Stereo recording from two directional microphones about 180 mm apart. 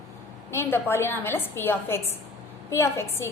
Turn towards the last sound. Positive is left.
turn(degrees=15)  # may be behind; listen again after turning